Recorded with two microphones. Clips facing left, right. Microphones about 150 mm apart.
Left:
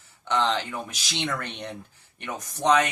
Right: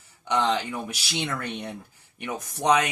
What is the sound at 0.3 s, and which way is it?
Speech, 10° right (ahead or behind).